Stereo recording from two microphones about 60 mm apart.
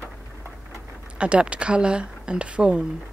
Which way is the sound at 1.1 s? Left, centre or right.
Centre.